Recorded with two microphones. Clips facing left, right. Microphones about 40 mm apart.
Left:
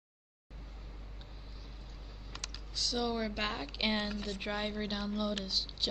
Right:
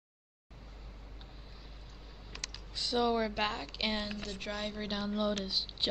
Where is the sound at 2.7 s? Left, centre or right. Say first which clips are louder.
Right 4 dB; right.